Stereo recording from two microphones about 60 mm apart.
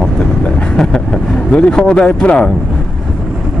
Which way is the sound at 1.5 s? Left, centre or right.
Centre.